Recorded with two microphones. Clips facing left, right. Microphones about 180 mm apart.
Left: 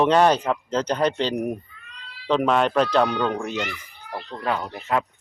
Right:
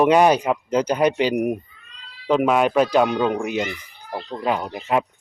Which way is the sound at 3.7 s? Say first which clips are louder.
Right 3 dB; 20° right (ahead or behind).